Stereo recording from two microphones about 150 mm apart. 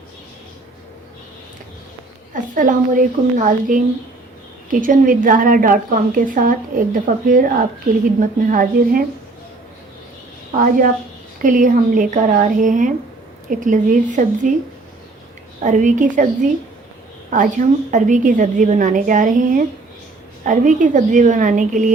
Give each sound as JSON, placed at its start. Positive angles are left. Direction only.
{"t": 2.3, "sound": "a woman's voice", "side_deg": -60}
{"t": 10.6, "sound": "a woman's voice", "side_deg": -65}
{"t": 15.6, "sound": "a woman's voice", "side_deg": -55}
{"t": 17.3, "sound": "a woman's voice", "side_deg": -60}